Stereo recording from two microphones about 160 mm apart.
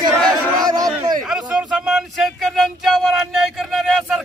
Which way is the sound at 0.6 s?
25° right (ahead or behind).